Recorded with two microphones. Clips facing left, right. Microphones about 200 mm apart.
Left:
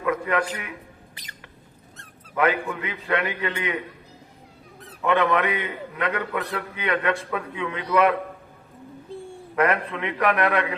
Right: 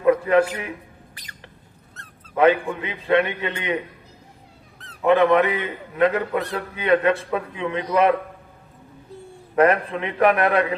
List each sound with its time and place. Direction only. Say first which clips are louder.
0.0 s a man's voice: right 7 dB; 30° right (ahead or behind)
2.3 s a man's voice: right 5 dB; 25° right (ahead or behind)
5.0 s a man's voice: right 5 dB; 30° right (ahead or behind)
9.1 s a sound: left 4 dB; 30° left (ahead or behind)
9.6 s a man's voice: right 5 dB; 30° right (ahead or behind)